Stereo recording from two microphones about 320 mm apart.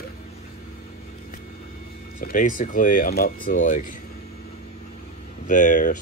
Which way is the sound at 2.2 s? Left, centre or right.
Left.